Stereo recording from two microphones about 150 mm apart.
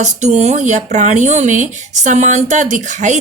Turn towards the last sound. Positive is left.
turn(degrees=-55)  # may be behind; listen again after turning